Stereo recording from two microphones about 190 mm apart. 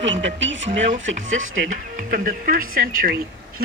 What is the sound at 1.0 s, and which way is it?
Speech, 90° right.